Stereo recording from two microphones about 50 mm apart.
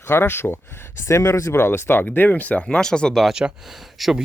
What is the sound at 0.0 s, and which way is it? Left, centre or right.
Speech, left.